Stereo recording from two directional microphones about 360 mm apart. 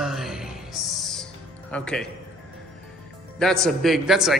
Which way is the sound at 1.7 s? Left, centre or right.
Centre.